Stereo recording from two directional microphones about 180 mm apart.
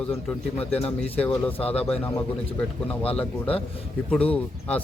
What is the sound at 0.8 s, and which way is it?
Speech, 35° left (ahead or behind).